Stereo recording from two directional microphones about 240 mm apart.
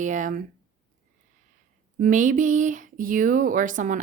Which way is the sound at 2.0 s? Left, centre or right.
Right.